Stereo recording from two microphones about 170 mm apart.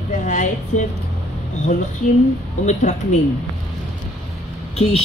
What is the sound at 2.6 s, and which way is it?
Speech, 45° left (ahead or behind).